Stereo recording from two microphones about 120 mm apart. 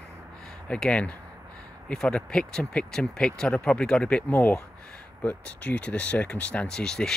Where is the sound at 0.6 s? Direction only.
10° left (ahead or behind).